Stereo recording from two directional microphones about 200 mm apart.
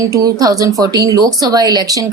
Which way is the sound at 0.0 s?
15° right (ahead or behind).